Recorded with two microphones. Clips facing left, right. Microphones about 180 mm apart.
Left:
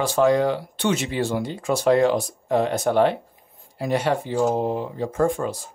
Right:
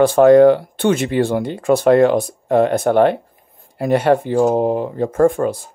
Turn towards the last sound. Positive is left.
turn(degrees=-55)  # may be behind; listen again after turning